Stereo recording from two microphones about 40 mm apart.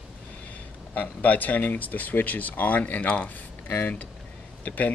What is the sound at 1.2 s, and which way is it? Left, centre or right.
Speech, left.